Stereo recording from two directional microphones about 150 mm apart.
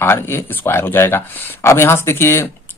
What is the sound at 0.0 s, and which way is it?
A man's voice, 15° left (ahead or behind).